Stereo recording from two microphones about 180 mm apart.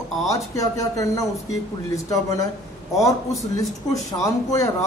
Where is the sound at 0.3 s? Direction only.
20° left (ahead or behind).